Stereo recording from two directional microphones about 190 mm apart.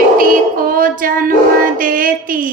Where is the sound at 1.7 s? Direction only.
45° right (ahead or behind).